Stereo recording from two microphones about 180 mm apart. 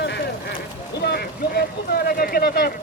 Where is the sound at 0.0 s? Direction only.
75° left (ahead or behind).